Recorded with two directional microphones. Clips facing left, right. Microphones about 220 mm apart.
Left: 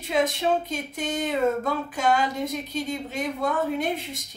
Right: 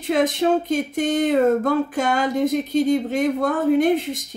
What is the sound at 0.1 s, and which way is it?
Speech, 50° right (ahead or behind).